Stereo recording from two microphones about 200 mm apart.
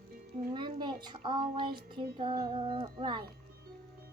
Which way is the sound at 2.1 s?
25° right (ahead or behind).